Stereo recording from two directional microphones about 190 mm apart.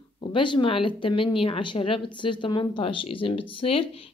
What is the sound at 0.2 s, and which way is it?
A woman's voice, 25° left (ahead or behind).